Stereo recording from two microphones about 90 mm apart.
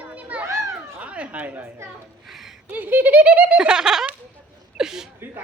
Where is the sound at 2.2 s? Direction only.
5° right (ahead or behind).